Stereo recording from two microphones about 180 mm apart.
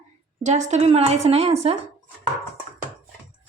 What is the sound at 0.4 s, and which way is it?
A woman's voice, 40° right (ahead or behind).